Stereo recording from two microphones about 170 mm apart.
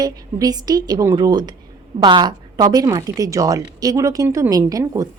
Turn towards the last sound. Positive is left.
turn(degrees=-20)  # may be behind; listen again after turning